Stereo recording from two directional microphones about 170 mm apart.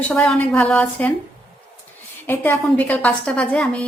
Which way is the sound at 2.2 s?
10° left (ahead or behind).